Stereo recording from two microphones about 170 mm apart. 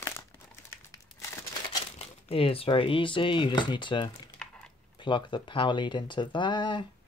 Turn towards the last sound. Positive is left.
turn(degrees=25)  # may be behind; listen again after turning